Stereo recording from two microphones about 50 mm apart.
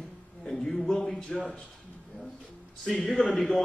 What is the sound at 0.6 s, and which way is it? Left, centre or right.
Speech, centre.